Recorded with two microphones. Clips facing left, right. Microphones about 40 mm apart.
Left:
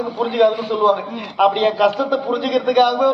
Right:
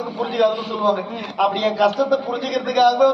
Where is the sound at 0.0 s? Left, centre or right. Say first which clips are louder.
Left 3 dB; centre.